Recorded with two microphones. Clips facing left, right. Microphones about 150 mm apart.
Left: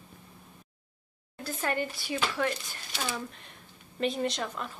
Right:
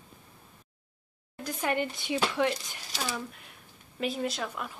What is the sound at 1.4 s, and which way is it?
Speech, 15° right (ahead or behind).